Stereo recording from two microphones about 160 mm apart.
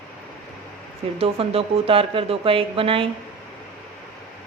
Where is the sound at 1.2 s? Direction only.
35° right (ahead or behind).